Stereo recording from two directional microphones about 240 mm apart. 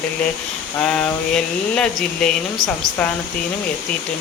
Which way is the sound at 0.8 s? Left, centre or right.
Centre.